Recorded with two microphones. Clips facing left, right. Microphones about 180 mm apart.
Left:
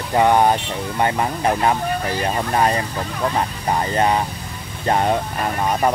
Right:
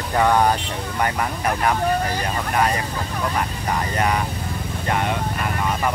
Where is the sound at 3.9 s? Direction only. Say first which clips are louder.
Left 3 dB; 30° left (ahead or behind).